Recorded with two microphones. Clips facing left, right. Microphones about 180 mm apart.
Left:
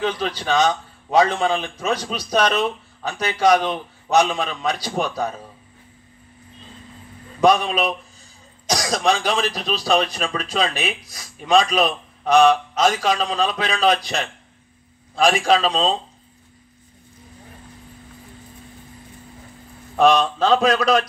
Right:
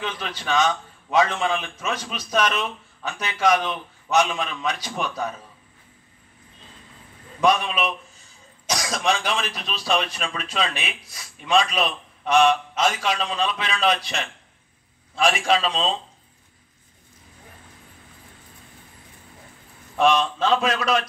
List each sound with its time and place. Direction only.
0.0 s speech: 35° left (ahead or behind)
7.3 s speech: 35° left (ahead or behind)
20.0 s speech: 35° left (ahead or behind)